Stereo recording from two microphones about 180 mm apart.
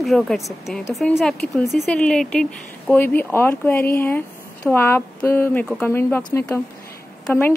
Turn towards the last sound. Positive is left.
turn(degrees=10)  # may be behind; listen again after turning